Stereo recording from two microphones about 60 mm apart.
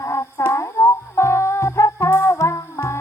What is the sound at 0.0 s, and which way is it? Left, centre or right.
Music, left.